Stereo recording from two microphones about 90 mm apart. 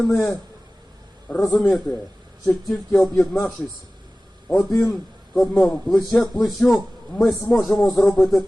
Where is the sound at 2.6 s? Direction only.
5° left (ahead or behind).